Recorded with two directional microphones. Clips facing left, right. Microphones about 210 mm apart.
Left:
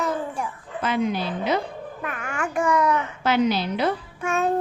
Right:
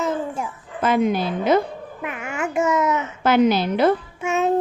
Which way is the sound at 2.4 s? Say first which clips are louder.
Right 2 dB; 25° right (ahead or behind).